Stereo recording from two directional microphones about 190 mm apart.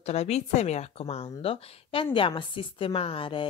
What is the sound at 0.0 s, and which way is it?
A woman's voice, 35° left (ahead or behind).